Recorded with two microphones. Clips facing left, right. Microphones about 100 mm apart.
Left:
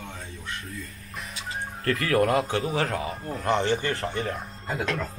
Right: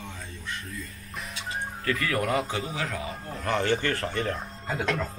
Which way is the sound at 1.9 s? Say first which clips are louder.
Left 5 dB; 45° left (ahead or behind).